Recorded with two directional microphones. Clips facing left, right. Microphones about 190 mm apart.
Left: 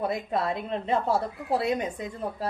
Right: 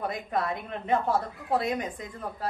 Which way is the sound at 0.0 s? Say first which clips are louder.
Left 2 dB; 25° left (ahead or behind).